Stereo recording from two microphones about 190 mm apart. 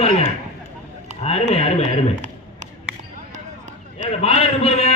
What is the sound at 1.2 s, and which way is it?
Speech, 35° left (ahead or behind).